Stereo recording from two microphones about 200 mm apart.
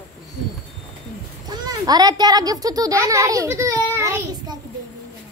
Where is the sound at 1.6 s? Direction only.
20° right (ahead or behind).